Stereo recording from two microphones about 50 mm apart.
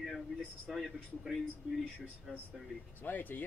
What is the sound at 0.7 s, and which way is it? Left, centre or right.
Speech, centre.